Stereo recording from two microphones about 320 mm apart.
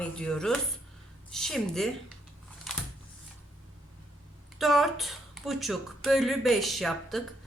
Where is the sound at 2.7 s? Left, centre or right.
Centre.